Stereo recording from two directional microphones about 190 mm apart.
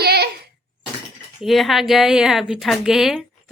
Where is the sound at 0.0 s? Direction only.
55° right (ahead or behind).